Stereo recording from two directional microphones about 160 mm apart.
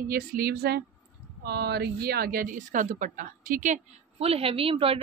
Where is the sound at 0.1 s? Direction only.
70° right (ahead or behind).